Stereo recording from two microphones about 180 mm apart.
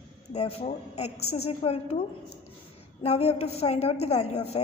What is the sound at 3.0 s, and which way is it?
A woman's voice, 35° left (ahead or behind).